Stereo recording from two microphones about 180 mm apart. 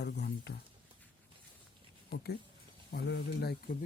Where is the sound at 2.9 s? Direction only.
65° left (ahead or behind).